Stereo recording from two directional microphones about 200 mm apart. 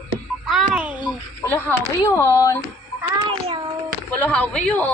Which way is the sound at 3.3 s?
25° right (ahead or behind).